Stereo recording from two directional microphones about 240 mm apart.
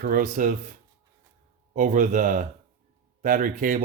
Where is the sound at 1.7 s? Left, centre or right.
Right.